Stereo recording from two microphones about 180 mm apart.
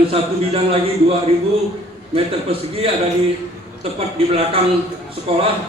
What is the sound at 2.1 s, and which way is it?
Speech, 30° right (ahead or behind).